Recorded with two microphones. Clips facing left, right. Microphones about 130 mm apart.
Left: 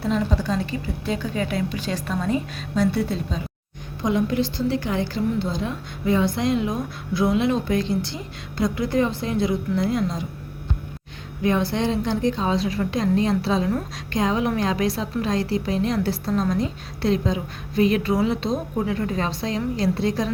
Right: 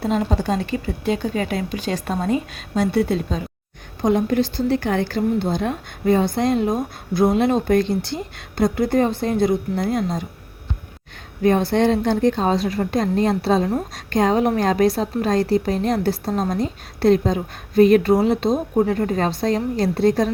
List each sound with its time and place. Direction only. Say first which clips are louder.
0.0 s a woman's voice: right 2 dB; 50° right (ahead or behind)
11.4 s a woman's voice: right 5 dB; 50° right (ahead or behind)